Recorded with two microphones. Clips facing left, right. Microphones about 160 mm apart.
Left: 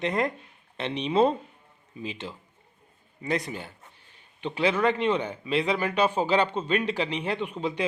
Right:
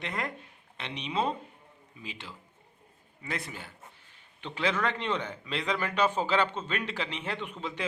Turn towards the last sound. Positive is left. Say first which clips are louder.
# left 7 dB
turn(degrees=15)  # may be behind; listen again after turning